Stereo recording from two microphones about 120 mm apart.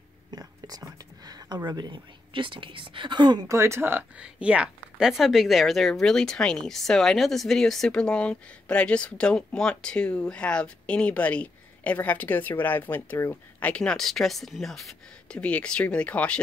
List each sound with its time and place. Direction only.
0.3 s whispering: 30° right (ahead or behind)
1.7 s speech: 40° right (ahead or behind)
3.4 s speech: 25° right (ahead or behind)
4.2 s a woman's voice: 10° right (ahead or behind); by 16.3 s 10° left (ahead or behind)